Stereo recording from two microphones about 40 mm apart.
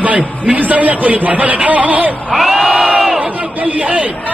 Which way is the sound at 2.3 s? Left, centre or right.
Centre.